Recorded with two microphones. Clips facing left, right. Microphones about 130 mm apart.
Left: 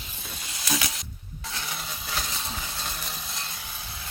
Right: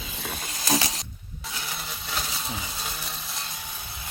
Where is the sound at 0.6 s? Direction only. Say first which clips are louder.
Right 4 dB; 35° right (ahead or behind).